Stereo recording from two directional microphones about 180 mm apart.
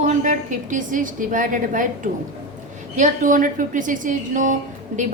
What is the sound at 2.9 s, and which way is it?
A woman's voice, 45° right (ahead or behind).